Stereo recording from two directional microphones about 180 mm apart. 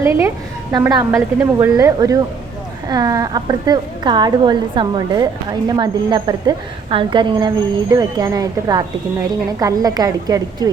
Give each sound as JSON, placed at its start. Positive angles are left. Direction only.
{"t": 0.0, "sound": "a woman's voice", "side_deg": -15}